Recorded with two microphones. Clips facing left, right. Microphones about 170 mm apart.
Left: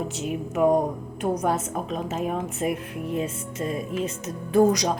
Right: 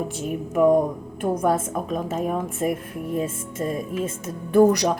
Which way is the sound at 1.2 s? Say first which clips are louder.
Right 3 dB; 50° right (ahead or behind).